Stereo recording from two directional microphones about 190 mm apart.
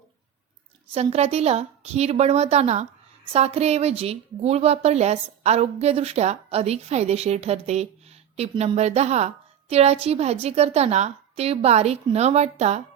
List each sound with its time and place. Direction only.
1.1 s a woman's voice: 35° right (ahead or behind)